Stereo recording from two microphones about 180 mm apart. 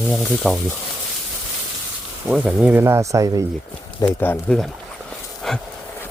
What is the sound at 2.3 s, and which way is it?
Speech, 5° right (ahead or behind).